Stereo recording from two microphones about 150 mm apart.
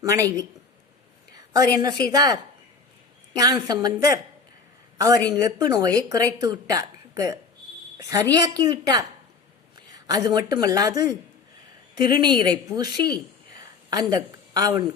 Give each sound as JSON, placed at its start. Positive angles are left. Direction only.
{"t": 0.0, "sound": "a woman's voice", "side_deg": -20}
{"t": 1.5, "sound": "a woman's voice", "side_deg": -25}